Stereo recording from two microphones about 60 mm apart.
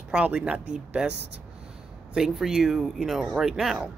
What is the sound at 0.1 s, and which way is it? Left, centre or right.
Speech, centre.